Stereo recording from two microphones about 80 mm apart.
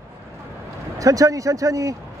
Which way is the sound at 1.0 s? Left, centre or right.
Right.